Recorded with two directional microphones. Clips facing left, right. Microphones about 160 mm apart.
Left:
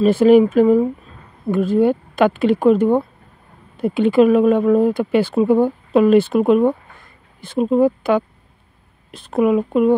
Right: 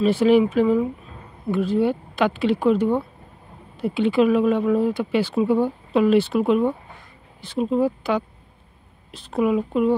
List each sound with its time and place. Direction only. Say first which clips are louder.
0.0 s speech: left 5 dB; 45° left (ahead or behind)